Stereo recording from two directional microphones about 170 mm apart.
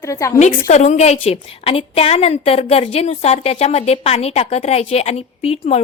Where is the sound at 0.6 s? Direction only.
45° left (ahead or behind).